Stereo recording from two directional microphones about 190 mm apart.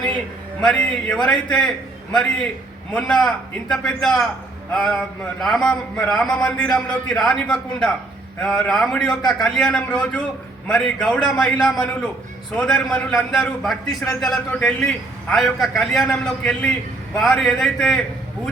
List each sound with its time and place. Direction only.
0.6 s a man's voice: 5° left (ahead or behind)
2.9 s a man's voice: 5° left (ahead or behind)